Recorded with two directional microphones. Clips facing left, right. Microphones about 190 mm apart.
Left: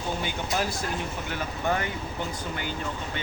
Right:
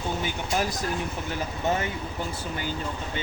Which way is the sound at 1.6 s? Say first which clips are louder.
Right 1 dB; 20° right (ahead or behind).